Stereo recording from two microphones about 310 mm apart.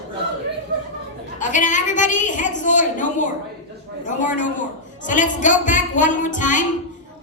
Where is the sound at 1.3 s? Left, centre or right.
Left.